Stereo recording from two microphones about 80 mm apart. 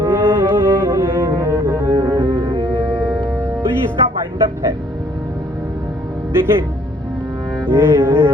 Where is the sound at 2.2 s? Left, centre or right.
Right.